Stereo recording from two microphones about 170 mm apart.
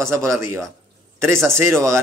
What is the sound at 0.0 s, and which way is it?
Speech, 15° right (ahead or behind).